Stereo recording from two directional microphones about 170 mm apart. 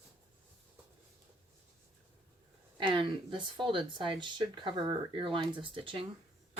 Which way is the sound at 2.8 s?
30° right (ahead or behind).